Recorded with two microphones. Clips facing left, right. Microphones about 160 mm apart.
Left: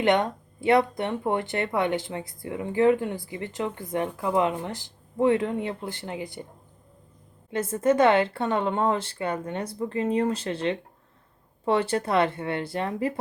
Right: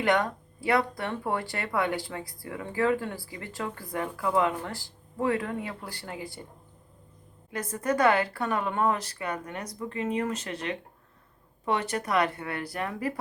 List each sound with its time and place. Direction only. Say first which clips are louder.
0.0 s speech: left 3 dB; 20° left (ahead or behind)
7.5 s speech: left 6 dB; 25° left (ahead or behind)